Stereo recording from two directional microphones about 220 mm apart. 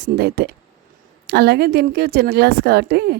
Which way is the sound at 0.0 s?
45° right (ahead or behind).